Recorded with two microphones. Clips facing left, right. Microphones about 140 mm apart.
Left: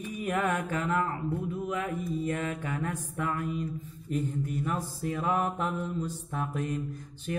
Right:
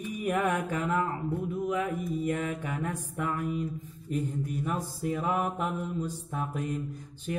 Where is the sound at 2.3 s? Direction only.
10° right (ahead or behind).